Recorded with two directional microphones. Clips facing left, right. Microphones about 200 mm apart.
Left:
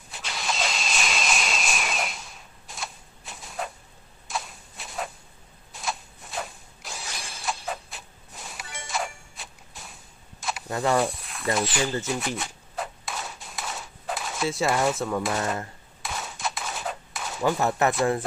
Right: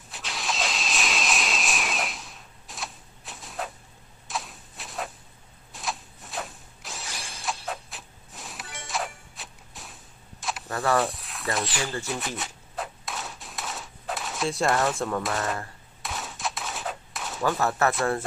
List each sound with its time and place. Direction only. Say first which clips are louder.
0.1 s vehicle: left 1 dB; centre (ahead or behind)
4.3 s a sound: left 1 dB; centre (ahead or behind)
10.7 s speech: left 1 dB; 15° left (ahead or behind)
11.0 s speech: left 1 dB; centre (ahead or behind)
12.4 s a sound: left 1 dB; centre (ahead or behind)
14.8 s speech: left 1 dB; 5° left (ahead or behind)
16.0 s gunshot: left 1 dB; centre (ahead or behind)
17.4 s speech: left 1 dB; 15° left (ahead or behind)